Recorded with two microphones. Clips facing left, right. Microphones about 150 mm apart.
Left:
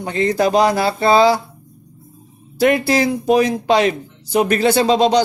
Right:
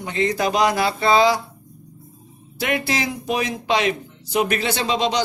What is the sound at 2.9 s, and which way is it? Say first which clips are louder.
Speech: left 9 dB; 40° left (ahead or behind).